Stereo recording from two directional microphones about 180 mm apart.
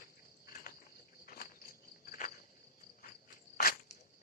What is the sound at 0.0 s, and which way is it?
Cricket, 50° left (ahead or behind).